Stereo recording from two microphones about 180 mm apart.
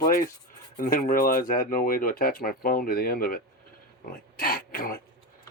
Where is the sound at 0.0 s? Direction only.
55° left (ahead or behind).